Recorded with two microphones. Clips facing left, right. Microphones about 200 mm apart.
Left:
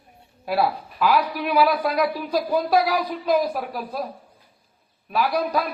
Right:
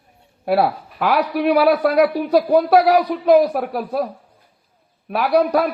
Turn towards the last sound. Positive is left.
turn(degrees=-70)  # may be behind; listen again after turning